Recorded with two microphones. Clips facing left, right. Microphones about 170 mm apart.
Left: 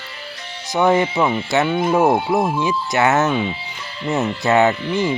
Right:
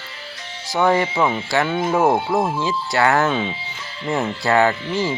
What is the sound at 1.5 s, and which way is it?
Speech, 15° left (ahead or behind).